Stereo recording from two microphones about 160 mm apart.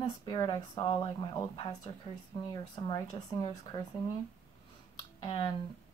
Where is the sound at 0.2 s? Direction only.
25° left (ahead or behind).